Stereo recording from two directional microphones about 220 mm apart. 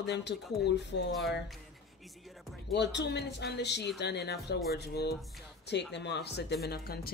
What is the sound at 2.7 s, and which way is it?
Speech, 50° left (ahead or behind).